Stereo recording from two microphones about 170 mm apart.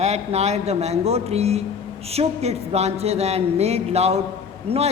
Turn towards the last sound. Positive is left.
turn(degrees=-35)  # may be behind; listen again after turning